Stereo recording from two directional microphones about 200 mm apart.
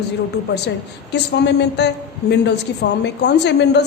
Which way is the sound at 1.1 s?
60° left (ahead or behind).